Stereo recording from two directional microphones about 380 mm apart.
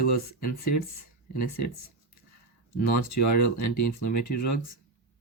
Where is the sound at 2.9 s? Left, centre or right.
Left.